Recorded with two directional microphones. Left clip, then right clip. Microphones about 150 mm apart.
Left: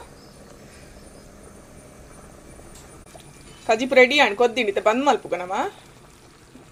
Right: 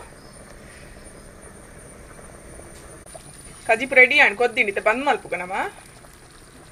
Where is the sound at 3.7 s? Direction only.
25° left (ahead or behind).